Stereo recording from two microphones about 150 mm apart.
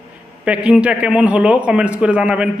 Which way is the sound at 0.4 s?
5° right (ahead or behind).